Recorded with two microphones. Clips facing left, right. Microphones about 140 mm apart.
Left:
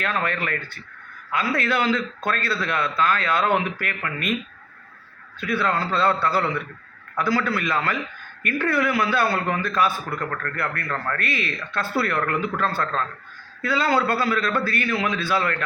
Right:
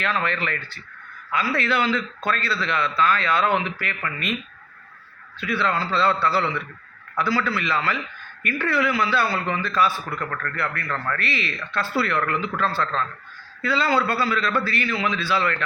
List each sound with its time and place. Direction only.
0.0 s a man's voice: 50° left (ahead or behind)
5.4 s a man's voice: 50° left (ahead or behind)